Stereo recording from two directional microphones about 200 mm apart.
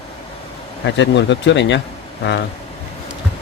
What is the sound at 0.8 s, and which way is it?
Speech, 65° left (ahead or behind).